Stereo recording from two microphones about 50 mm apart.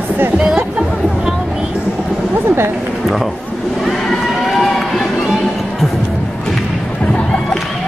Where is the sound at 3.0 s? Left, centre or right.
Centre.